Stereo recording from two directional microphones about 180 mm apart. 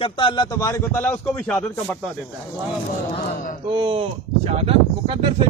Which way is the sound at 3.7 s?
30° right (ahead or behind).